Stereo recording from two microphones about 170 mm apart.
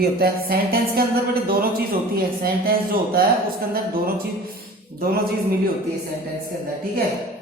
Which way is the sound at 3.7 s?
60° right (ahead or behind).